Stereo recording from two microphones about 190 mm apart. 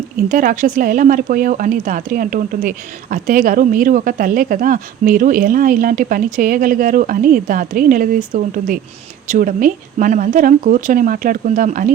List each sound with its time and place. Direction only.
0.2 s speech: 45° right (ahead or behind)